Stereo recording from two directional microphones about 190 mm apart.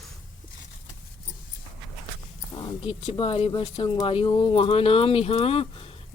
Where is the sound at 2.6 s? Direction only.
30° left (ahead or behind).